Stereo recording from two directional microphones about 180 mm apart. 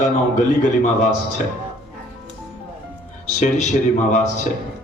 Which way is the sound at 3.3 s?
40° left (ahead or behind).